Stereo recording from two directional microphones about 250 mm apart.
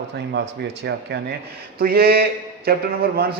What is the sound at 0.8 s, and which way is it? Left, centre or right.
A man's voice, right.